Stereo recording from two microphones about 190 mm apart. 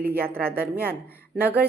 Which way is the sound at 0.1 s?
10° right (ahead or behind).